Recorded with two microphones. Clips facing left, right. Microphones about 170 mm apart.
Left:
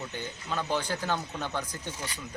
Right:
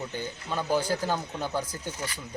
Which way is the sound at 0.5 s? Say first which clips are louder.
Right 4 dB; 10° right (ahead or behind).